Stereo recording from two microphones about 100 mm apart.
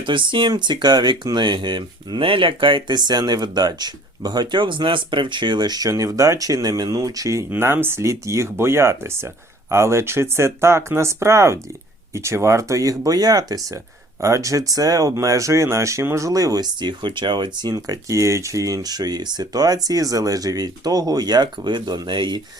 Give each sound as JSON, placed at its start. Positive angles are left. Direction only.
{"t": 0.0, "sound": "speech", "side_deg": -55}
{"t": 7.5, "sound": "speech", "side_deg": -25}
{"t": 17.7, "sound": "speech", "side_deg": -30}